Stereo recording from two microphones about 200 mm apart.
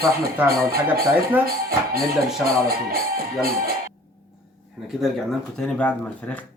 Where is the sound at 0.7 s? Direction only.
50° right (ahead or behind).